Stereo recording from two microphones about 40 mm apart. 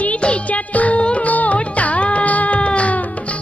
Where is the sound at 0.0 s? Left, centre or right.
Left.